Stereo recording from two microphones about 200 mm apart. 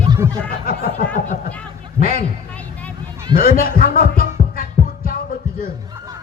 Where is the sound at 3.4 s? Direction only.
45° left (ahead or behind).